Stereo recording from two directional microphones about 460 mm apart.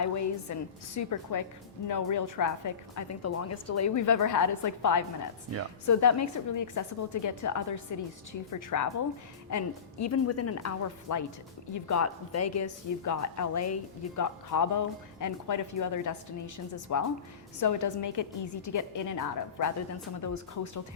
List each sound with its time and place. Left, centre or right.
0.0 s a woman's voice: left